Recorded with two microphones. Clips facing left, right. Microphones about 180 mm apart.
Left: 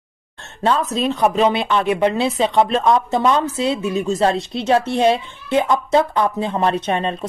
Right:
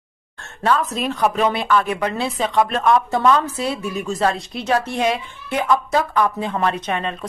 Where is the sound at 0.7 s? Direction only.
25° left (ahead or behind).